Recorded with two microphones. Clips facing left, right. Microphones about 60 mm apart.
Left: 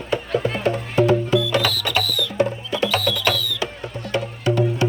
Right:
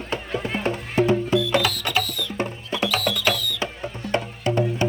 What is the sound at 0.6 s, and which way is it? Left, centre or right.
Music, right.